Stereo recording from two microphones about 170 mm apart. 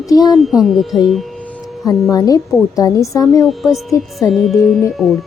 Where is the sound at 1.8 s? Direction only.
20° left (ahead or behind).